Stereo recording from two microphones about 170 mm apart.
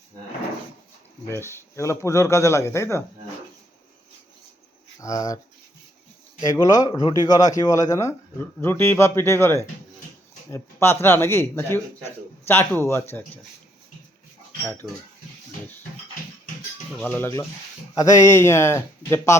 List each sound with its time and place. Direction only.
1.3 s a man's voice: 15° left (ahead or behind)
4.9 s speech: 20° left (ahead or behind)
6.4 s a man's voice: 20° left (ahead or behind)
14.6 s a man's voice: 10° left (ahead or behind)
17.0 s a man's voice: 10° left (ahead or behind)